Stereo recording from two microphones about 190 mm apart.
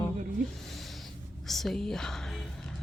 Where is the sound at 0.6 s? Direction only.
Centre (ahead or behind).